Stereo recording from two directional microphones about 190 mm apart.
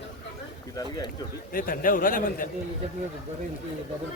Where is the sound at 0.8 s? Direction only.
20° left (ahead or behind).